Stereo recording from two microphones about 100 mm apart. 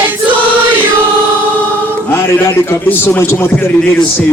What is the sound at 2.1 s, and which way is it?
A man's voice, 25° left (ahead or behind).